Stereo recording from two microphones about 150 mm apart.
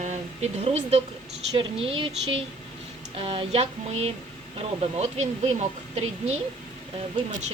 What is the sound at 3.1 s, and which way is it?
Speech, 40° right (ahead or behind).